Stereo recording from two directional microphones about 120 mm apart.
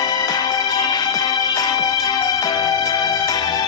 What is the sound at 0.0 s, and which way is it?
Music, 35° left (ahead or behind).